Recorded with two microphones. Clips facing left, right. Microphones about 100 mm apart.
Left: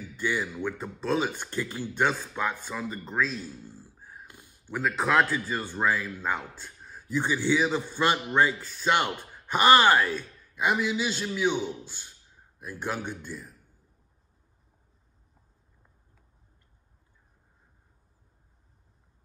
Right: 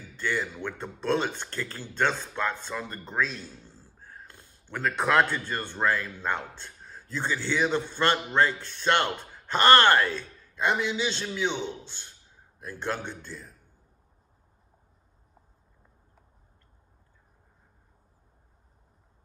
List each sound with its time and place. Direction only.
0.1 s a man's voice: 10° left (ahead or behind)